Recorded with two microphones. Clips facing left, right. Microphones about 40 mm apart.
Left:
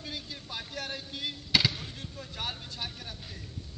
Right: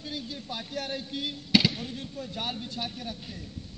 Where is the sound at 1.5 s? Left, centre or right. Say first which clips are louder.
Right 3 dB; right.